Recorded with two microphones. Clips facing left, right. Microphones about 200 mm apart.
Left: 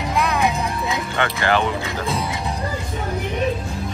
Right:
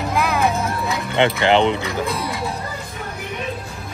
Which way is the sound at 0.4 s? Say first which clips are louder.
Right 1 dB; 15° left (ahead or behind).